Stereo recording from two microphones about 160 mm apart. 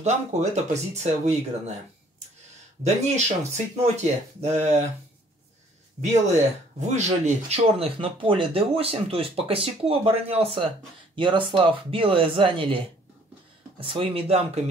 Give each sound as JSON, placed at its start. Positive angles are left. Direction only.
{"t": 0.0, "sound": "speech", "side_deg": -45}
{"t": 2.8, "sound": "speech", "side_deg": -45}
{"t": 5.9, "sound": "speech", "side_deg": -45}